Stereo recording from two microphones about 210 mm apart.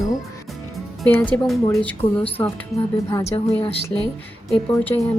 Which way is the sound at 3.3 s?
25° left (ahead or behind).